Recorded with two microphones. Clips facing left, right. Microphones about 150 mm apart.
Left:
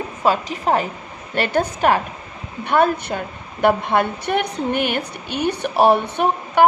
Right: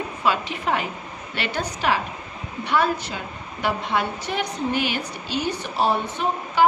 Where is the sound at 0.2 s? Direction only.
40° left (ahead or behind).